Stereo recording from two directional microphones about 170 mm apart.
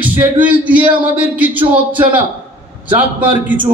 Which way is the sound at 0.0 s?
10° right (ahead or behind).